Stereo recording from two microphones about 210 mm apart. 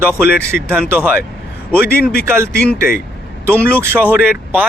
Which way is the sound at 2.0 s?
45° left (ahead or behind).